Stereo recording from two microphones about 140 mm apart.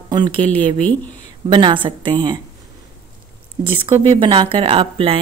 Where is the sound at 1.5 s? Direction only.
35° right (ahead or behind).